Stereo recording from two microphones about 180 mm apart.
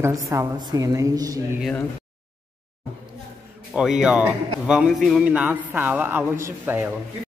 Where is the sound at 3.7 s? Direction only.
5° right (ahead or behind).